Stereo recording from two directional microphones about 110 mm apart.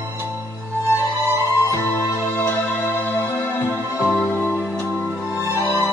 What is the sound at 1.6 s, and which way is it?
Music, 25° left (ahead or behind).